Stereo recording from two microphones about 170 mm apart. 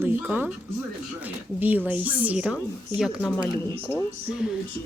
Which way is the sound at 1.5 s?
10° right (ahead or behind).